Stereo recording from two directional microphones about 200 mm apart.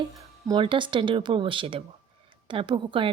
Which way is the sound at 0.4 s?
20° right (ahead or behind).